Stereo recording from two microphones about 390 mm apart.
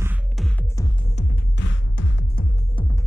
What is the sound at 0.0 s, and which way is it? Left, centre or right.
Music, centre.